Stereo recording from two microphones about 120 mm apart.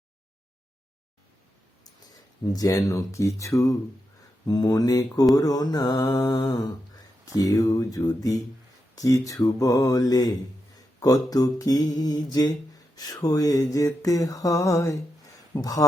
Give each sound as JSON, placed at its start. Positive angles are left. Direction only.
{"t": 2.5, "sound": "mantra", "side_deg": 30}